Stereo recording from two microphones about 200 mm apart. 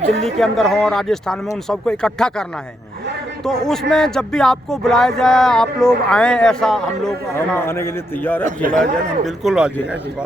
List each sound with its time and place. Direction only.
0.3 s a man's voice: centre (ahead or behind)
3.7 s a man's voice: 5° left (ahead or behind)